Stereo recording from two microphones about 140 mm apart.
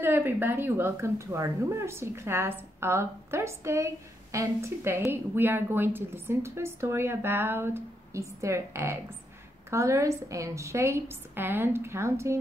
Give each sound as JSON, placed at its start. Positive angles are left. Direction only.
{"t": 0.0, "sound": "a woman's voice", "side_deg": -15}